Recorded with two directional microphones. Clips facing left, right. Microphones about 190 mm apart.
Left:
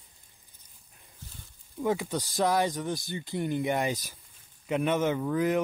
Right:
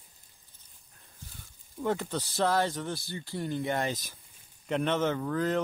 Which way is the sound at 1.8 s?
10° left (ahead or behind).